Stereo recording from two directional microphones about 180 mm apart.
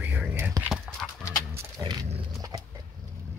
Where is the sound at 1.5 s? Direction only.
20° right (ahead or behind).